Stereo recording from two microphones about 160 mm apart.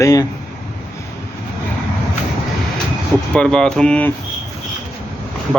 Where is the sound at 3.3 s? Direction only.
5° left (ahead or behind).